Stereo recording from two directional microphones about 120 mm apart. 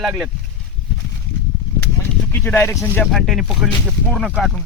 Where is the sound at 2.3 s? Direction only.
15° left (ahead or behind).